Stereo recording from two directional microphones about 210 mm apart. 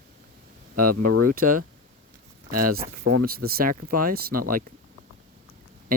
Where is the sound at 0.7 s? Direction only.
45° right (ahead or behind).